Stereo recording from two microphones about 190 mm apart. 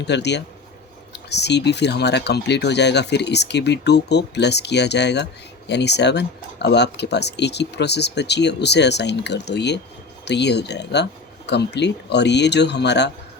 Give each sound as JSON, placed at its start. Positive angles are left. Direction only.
{"t": 0.0, "sound": "speech", "side_deg": 65}